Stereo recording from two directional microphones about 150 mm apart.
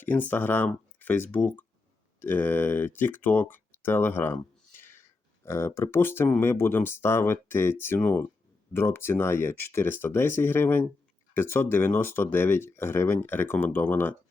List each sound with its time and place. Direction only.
0.0 s speech: 10° left (ahead or behind)
0.7 s a sound: 10° left (ahead or behind)
1.3 s speech: 10° left (ahead or behind)